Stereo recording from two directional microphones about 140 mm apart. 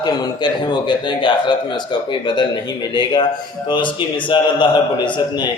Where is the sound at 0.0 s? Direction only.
30° left (ahead or behind).